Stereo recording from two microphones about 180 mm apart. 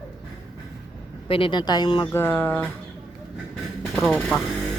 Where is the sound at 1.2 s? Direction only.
30° left (ahead or behind).